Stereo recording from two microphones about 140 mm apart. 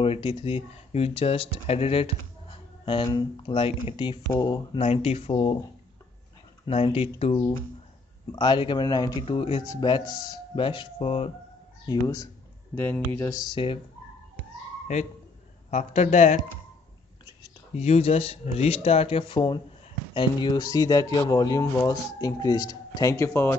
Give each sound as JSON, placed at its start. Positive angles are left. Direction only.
{"t": 0.0, "sound": "speech", "side_deg": 40}
{"t": 4.8, "sound": "speech", "side_deg": 45}
{"t": 6.6, "sound": "speech", "side_deg": 45}
{"t": 8.3, "sound": "speech", "side_deg": 30}
{"t": 9.2, "sound": "speech", "side_deg": 40}
{"t": 11.9, "sound": "speech", "side_deg": 25}
{"t": 12.7, "sound": "speech", "side_deg": 15}
{"t": 15.7, "sound": "speech", "side_deg": 50}
{"t": 17.7, "sound": "speech", "side_deg": 50}